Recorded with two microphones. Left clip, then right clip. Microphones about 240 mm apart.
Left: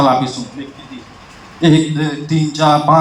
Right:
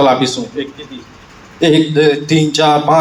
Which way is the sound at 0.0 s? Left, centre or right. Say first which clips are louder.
Right 2 dB; right.